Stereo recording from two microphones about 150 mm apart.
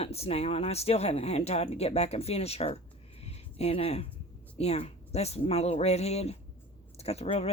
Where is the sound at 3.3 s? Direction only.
40° left (ahead or behind).